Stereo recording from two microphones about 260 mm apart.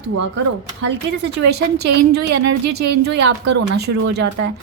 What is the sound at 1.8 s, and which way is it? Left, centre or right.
Speech, right.